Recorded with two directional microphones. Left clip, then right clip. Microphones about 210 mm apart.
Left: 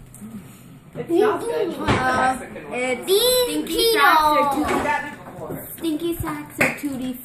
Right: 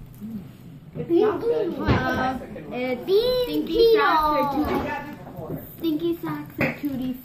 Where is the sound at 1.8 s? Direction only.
10° left (ahead or behind).